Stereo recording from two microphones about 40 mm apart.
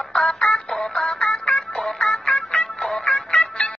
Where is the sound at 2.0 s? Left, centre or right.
Left.